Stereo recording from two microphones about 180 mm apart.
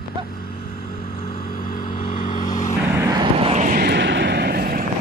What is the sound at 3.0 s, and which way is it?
Vehicle, 20° right (ahead or behind).